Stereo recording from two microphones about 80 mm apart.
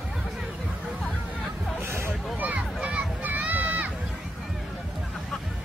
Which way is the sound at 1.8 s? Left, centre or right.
Right.